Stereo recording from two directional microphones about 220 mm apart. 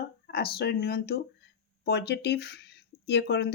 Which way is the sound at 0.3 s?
45° left (ahead or behind).